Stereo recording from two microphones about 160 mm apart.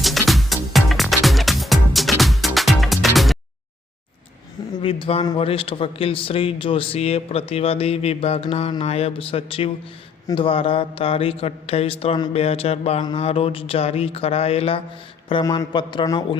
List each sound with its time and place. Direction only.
0.0 s music: centre (ahead or behind)
4.8 s a man's voice: 35° left (ahead or behind)
15.3 s speech: 25° left (ahead or behind)